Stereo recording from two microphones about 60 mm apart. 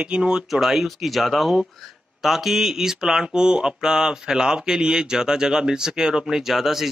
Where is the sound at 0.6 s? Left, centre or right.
Centre.